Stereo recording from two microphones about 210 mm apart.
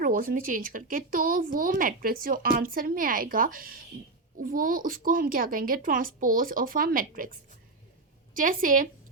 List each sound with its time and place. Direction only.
0.0 s a woman's voice: 40° right (ahead or behind)